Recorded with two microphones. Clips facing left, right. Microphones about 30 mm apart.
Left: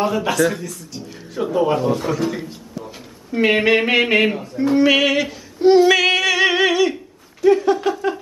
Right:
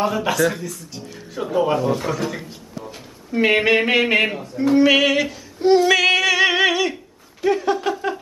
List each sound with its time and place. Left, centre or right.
0.0 s speech: centre